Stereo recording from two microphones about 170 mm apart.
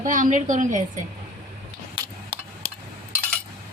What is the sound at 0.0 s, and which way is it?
Speech, 50° right (ahead or behind).